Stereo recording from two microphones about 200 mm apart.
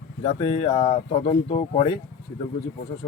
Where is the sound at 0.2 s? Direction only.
25° left (ahead or behind).